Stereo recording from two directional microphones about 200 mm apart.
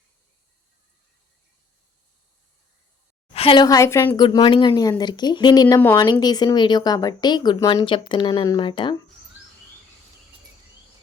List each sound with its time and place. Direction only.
3.3 s a woman's voice: 25° left (ahead or behind)